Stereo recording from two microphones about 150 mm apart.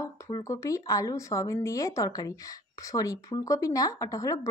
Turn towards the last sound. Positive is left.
turn(degrees=20)  # may be behind; listen again after turning